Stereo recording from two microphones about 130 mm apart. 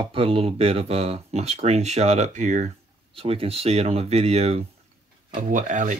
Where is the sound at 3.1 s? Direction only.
50° right (ahead or behind).